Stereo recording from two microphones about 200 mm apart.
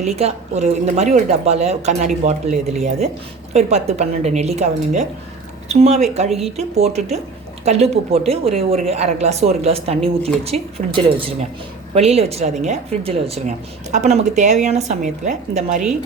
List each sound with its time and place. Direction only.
0.0 s speech: 35° right (ahead or behind)